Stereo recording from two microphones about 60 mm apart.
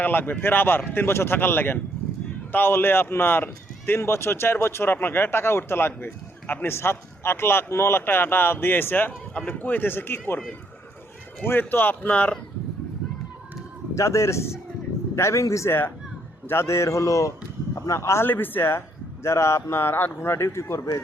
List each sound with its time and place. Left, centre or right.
0.0 s a man's voice: left
11.4 s a man's voice: left
13.9 s a man's voice: left
16.5 s a man's voice: left
18.3 s a man's voice: left
19.2 s speech: left
19.8 s speech: left